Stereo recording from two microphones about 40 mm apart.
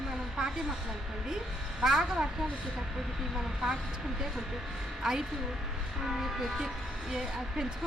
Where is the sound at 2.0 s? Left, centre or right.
Right.